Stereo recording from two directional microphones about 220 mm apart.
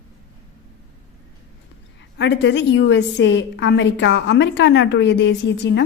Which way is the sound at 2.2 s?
50° left (ahead or behind).